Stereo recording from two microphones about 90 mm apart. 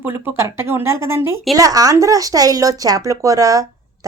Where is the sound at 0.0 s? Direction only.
30° right (ahead or behind).